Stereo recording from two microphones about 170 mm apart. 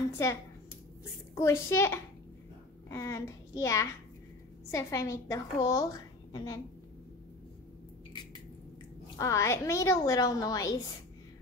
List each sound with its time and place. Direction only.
1.3 s a woman's voice: 15° left (ahead or behind)
9.2 s a woman's voice: 15° left (ahead or behind)